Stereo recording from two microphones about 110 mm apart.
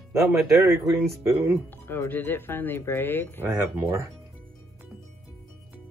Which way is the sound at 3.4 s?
20° right (ahead or behind).